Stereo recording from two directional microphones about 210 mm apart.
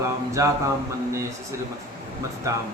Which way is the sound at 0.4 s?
15° right (ahead or behind).